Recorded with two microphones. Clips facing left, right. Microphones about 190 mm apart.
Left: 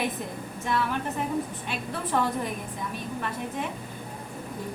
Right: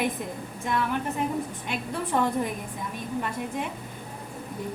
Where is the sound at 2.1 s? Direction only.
15° right (ahead or behind).